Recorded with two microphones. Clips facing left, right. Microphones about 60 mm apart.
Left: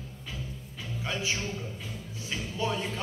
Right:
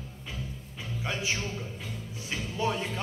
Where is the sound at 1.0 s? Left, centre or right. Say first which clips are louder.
Even; right.